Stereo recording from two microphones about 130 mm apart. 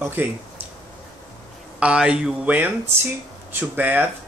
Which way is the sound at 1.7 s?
10° right (ahead or behind).